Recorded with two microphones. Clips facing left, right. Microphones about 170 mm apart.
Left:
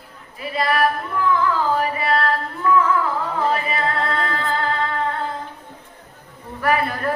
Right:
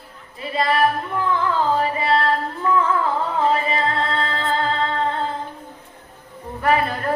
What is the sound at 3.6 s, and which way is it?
Music, 25° right (ahead or behind).